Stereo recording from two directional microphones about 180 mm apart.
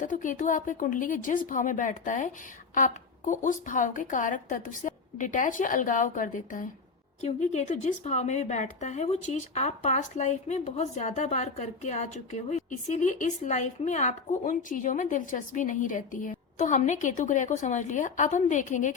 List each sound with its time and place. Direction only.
0.0 s a woman's voice: 45° left (ahead or behind)